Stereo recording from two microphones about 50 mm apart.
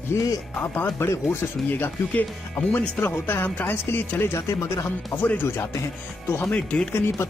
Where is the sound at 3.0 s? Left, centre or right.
Left.